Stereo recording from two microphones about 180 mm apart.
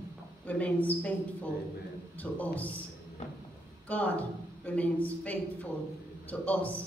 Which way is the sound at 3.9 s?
10° left (ahead or behind).